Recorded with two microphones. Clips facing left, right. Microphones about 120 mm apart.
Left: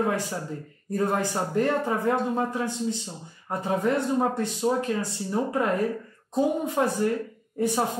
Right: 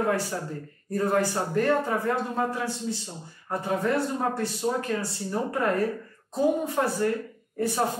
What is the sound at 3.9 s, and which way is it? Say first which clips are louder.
Speech: left 3 dB; 20° left (ahead or behind).